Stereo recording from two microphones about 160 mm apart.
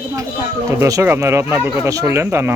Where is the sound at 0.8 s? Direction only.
20° right (ahead or behind).